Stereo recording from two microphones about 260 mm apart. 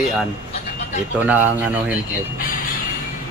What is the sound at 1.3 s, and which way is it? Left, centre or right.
Speech, centre.